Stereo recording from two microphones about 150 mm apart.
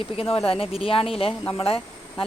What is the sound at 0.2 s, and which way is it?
Speech, 40° left (ahead or behind).